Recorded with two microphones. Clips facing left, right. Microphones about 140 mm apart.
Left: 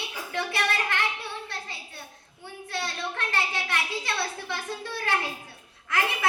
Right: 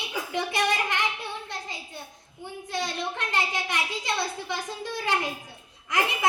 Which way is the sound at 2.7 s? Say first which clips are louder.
Right 2 dB; 20° right (ahead or behind).